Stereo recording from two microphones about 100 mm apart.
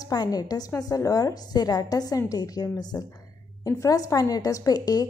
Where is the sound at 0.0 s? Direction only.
40° left (ahead or behind).